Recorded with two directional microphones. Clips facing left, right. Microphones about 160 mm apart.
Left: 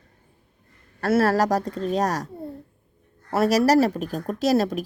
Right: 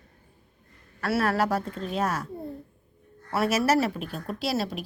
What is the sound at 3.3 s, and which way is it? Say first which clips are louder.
Speech: left 5 dB; 40° left (ahead or behind).